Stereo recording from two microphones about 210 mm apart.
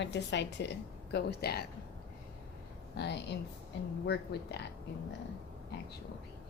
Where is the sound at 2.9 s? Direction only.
55° left (ahead or behind).